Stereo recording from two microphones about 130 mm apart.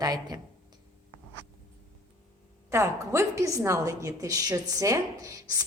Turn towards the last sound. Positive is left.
turn(degrees=-25)  # may be behind; listen again after turning